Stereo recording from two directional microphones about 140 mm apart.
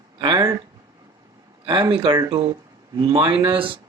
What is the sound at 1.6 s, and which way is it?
Speech, 35° right (ahead or behind).